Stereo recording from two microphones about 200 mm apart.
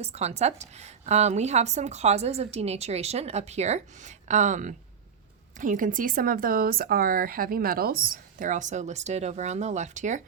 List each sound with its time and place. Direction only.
0.0 s a woman's voice: 30° right (ahead or behind)